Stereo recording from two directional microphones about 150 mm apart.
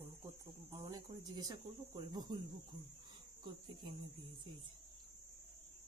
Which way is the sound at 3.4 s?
30° right (ahead or behind).